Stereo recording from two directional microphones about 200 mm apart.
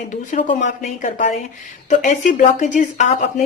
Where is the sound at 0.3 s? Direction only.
40° left (ahead or behind).